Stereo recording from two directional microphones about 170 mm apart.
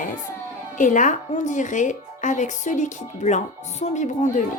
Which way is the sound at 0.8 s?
50° left (ahead or behind).